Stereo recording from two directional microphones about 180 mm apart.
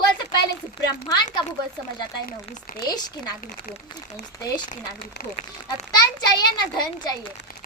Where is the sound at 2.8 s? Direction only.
20° left (ahead or behind).